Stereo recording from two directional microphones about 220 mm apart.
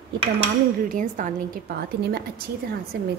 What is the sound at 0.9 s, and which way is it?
A woman's voice, 35° right (ahead or behind).